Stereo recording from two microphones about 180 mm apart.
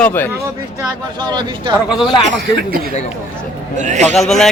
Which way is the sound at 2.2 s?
80° right.